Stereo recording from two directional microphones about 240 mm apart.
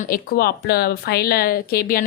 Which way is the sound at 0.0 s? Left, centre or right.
Left.